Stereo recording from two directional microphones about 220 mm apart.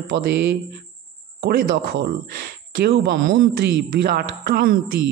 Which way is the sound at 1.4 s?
50° right (ahead or behind).